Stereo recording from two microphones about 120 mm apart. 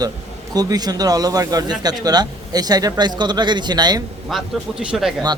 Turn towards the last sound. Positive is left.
turn(degrees=-5)  # may be behind; listen again after turning